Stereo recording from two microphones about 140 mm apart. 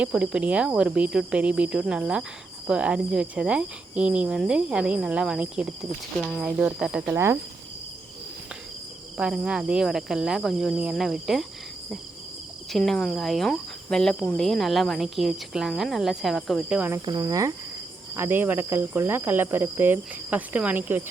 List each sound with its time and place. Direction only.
0.0 s speech: 5° right (ahead or behind)
9.1 s speech: 5° right (ahead or behind)
12.7 s speech: centre (ahead or behind)
17.1 s cricket: 30° right (ahead or behind)
18.2 s speech: 15° right (ahead or behind)